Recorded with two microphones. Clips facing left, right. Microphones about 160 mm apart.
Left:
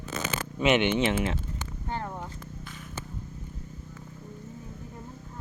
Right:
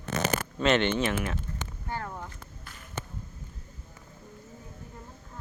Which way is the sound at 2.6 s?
Centre (ahead or behind).